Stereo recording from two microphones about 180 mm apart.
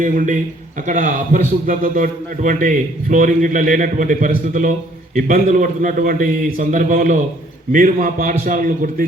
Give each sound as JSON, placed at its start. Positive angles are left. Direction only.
{"t": 0.0, "sound": "a man's voice", "side_deg": -45}